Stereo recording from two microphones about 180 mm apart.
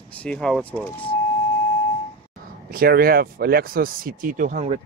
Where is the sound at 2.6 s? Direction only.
55° right (ahead or behind).